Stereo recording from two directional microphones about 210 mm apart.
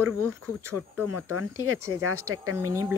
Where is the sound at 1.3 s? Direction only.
90° right.